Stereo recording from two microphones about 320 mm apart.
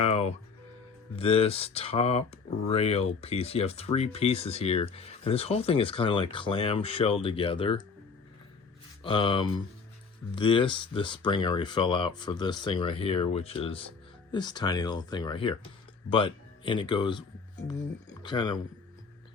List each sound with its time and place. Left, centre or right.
0.0 s music: centre
1.1 s speech: centre
9.0 s speech: centre